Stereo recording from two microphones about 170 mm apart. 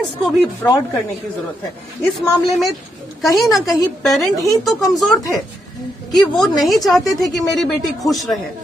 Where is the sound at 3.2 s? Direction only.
Centre (ahead or behind).